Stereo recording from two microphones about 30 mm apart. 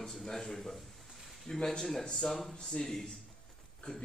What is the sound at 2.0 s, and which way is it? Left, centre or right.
Speech, centre.